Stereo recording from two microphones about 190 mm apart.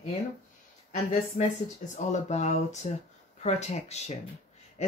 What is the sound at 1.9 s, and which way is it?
Speech, 40° left (ahead or behind).